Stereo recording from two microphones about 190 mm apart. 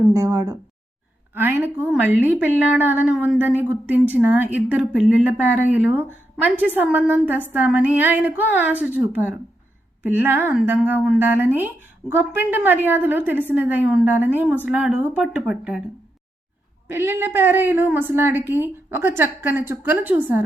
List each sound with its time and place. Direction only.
0.0 s a woman's voice: 15° right (ahead or behind)
16.9 s a woman's voice: 10° right (ahead or behind)